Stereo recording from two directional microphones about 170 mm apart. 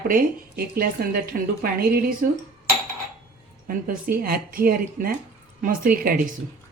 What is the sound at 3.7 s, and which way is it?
A woman's voice, 60° right (ahead or behind).